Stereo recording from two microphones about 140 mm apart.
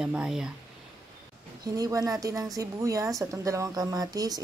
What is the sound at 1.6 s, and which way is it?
A woman's voice, 25° right (ahead or behind).